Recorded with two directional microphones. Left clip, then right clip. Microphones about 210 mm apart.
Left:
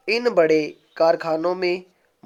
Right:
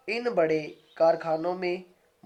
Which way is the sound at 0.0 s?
45° left (ahead or behind).